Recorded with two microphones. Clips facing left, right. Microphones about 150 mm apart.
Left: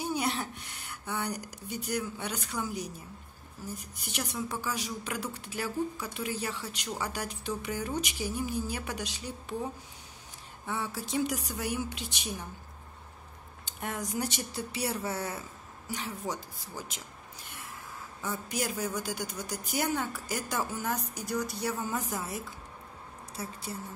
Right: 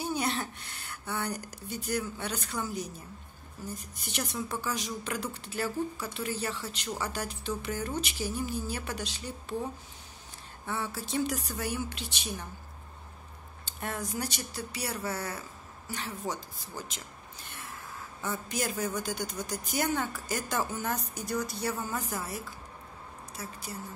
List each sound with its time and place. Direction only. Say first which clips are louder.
0.0 s speech: even; 10° left (ahead or behind)
10.7 s speech: even; 15° left (ahead or behind)
13.7 s speech: even; 15° left (ahead or behind)
15.9 s speech: even; 10° left (ahead or behind)
18.2 s speech: even; 10° left (ahead or behind)
23.3 s a woman's voice: left 3 dB; 30° left (ahead or behind)